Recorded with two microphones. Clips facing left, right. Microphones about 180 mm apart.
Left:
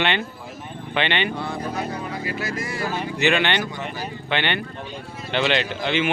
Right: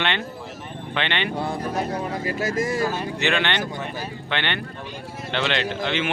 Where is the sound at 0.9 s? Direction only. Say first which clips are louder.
Left 3 dB; 5° left (ahead or behind).